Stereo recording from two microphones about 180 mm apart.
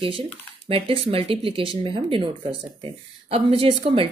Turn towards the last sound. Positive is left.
turn(degrees=-30)  # may be behind; listen again after turning